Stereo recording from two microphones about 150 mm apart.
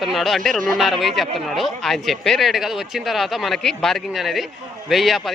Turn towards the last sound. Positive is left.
turn(degrees=0)  # may be behind; listen again after turning